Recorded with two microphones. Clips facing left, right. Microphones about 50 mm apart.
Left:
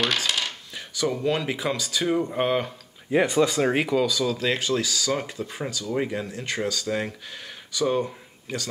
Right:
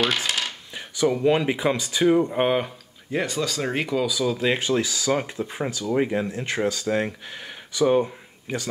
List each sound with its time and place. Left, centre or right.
0.7 s speech: right
2.3 s speech: centre
3.1 s speech: centre
3.7 s speech: centre
4.0 s speech: centre